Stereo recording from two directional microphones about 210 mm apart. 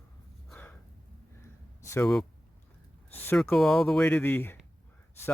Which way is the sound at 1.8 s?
15° left (ahead or behind).